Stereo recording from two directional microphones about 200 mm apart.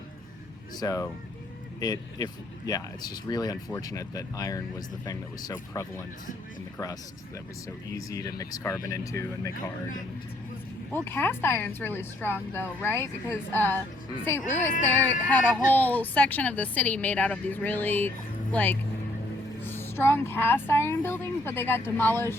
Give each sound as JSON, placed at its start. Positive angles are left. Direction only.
{"t": 0.8, "sound": "speech", "side_deg": 15}
{"t": 7.9, "sound": "speech", "side_deg": 15}
{"t": 10.9, "sound": "speech", "side_deg": 10}